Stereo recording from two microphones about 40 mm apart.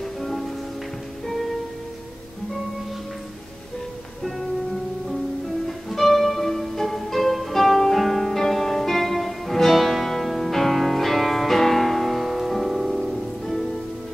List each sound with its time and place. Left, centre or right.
0.0 s music: centre
5.7 s music: centre